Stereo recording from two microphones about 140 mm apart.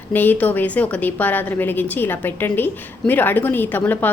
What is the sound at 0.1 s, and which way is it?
A woman's voice, 15° left (ahead or behind).